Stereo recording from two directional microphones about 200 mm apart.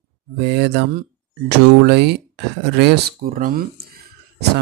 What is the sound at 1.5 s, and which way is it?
Speech, 55° right (ahead or behind).